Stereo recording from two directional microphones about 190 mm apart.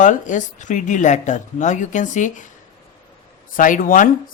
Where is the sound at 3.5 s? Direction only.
45° left (ahead or behind).